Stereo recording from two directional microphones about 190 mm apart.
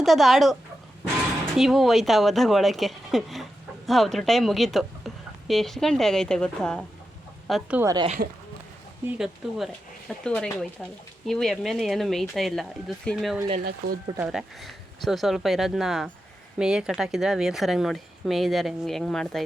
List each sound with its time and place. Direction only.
0.0 s a woman's voice: centre (ahead or behind)
1.5 s a woman's voice: centre (ahead or behind)
7.8 s speech: 15° right (ahead or behind)
9.0 s a woman's voice: 5° right (ahead or behind)
13.7 s speech: 50° right (ahead or behind)
14.2 s a woman's voice: 5° right (ahead or behind)